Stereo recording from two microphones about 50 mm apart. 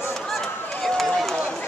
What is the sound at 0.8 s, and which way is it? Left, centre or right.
Run, centre.